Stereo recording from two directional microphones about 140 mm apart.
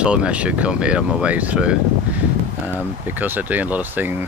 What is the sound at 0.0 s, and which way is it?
Speech, 10° right (ahead or behind).